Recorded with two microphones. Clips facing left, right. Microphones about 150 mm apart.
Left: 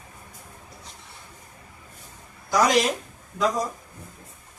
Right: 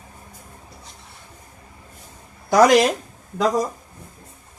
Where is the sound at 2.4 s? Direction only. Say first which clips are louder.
Right 7 dB; 65° right (ahead or behind).